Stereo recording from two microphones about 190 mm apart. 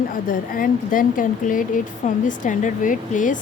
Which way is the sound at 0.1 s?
45° left (ahead or behind).